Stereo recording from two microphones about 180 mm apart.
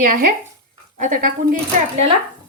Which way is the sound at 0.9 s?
45° right (ahead or behind).